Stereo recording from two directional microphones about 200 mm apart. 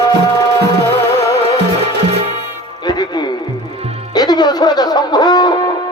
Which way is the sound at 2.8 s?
20° left (ahead or behind).